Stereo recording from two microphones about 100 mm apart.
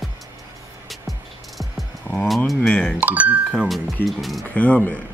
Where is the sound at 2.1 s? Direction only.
Centre (ahead or behind).